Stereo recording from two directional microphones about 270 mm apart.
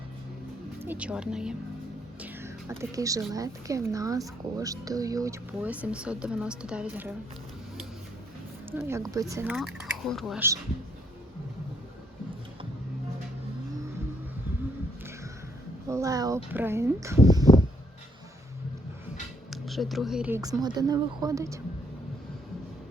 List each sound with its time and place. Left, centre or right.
0.8 s speech: centre
8.7 s speech: centre
15.9 s speech: centre
19.5 s speech: centre